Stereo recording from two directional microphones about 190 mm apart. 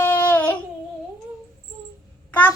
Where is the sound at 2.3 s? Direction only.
10° left (ahead or behind).